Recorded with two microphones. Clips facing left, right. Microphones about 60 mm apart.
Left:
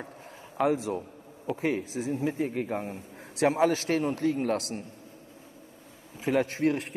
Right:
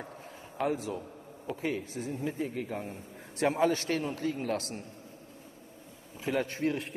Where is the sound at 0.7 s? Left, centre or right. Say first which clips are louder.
Left 5 dB; left.